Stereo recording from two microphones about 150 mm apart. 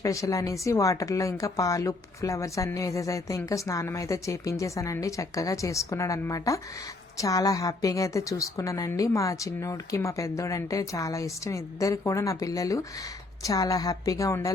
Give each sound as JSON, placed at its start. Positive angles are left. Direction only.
{"t": 0.0, "sound": "a woman's voice", "side_deg": 20}